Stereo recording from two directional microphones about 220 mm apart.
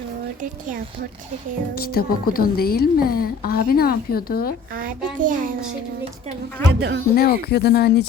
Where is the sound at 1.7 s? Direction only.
45° left (ahead or behind).